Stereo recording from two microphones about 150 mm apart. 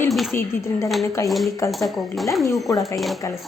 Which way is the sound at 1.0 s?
20° left (ahead or behind).